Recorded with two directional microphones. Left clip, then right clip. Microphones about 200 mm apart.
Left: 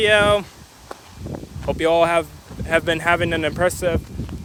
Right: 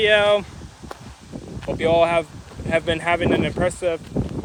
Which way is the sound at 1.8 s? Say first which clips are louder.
Left 1 dB; 40° left (ahead or behind).